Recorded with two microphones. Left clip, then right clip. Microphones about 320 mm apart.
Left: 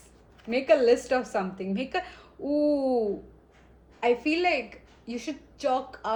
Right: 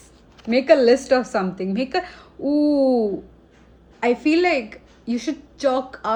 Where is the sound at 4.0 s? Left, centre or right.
Right.